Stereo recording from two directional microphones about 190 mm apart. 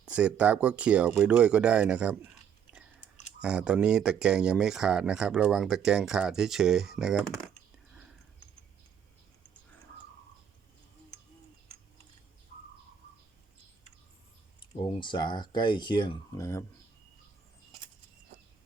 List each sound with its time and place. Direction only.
0.0 s speech: 5° right (ahead or behind)
3.4 s speech: 5° right (ahead or behind)
14.6 s speech: 25° left (ahead or behind)